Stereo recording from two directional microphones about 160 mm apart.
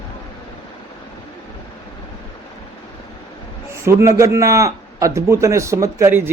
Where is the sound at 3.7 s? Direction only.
15° right (ahead or behind).